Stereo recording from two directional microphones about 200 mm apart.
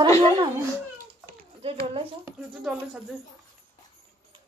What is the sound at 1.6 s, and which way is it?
Speech, 25° right (ahead or behind).